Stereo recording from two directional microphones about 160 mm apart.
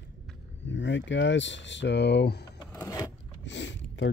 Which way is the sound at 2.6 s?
20° left (ahead or behind).